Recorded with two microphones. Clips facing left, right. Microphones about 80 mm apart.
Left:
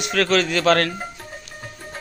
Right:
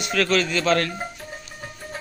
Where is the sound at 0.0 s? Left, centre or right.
Left.